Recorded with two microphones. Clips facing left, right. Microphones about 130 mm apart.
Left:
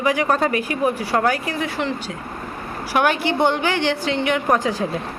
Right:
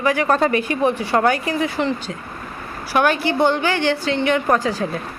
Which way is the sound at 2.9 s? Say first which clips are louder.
Right 1 dB; 15° left (ahead or behind).